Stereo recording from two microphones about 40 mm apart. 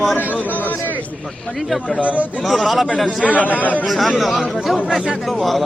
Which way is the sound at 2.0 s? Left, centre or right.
Right.